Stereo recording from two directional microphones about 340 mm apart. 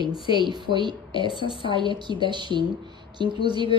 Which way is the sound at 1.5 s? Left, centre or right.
Centre.